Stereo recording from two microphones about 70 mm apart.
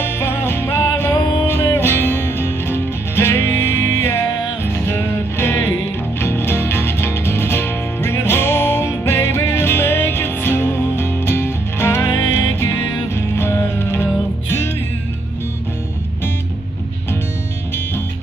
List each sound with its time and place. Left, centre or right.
0.0 s music: left